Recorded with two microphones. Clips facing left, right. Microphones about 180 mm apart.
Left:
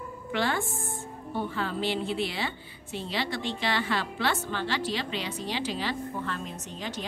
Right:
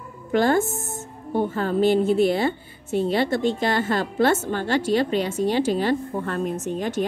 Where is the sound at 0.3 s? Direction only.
45° right (ahead or behind).